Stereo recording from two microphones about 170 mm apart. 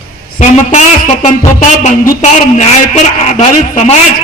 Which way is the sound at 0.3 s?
45° left (ahead or behind).